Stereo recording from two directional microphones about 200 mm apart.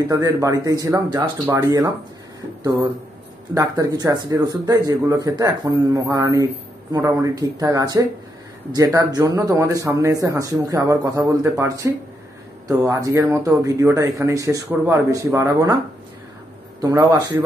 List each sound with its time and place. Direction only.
0.1 s speech: 15° right (ahead or behind)
3.5 s speech: 20° right (ahead or behind)
16.8 s a man's voice: 20° right (ahead or behind)